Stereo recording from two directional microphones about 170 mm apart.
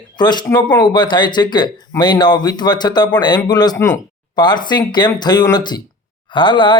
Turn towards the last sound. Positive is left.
turn(degrees=30)  # may be behind; listen again after turning